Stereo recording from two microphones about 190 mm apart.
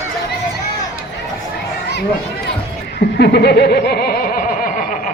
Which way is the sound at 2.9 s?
60° left (ahead or behind).